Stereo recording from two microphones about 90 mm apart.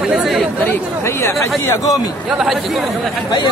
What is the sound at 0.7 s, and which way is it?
Speech, 30° left (ahead or behind).